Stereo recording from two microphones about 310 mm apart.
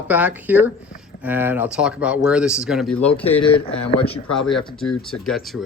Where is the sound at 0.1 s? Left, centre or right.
Centre.